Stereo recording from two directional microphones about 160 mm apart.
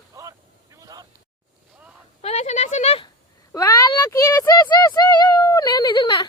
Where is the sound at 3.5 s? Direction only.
25° left (ahead or behind).